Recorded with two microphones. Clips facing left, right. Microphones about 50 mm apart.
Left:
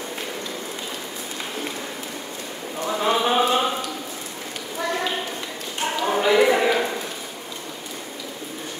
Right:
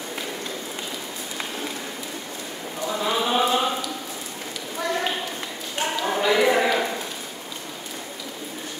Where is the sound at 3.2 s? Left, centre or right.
Centre.